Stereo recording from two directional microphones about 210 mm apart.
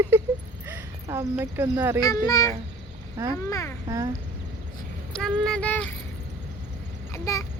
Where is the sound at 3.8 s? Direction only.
15° right (ahead or behind).